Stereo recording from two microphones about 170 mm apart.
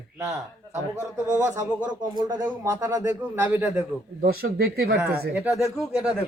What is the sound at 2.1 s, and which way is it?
Speech, 25° right (ahead or behind).